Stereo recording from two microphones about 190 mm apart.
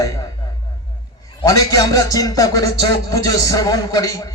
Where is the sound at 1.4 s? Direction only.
20° left (ahead or behind).